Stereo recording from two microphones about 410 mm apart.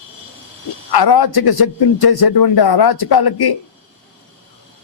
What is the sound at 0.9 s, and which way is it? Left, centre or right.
A man's voice, left.